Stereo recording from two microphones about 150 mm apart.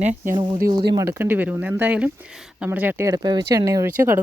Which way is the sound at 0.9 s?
20° right (ahead or behind).